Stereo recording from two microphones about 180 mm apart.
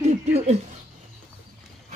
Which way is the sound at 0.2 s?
40° right (ahead or behind).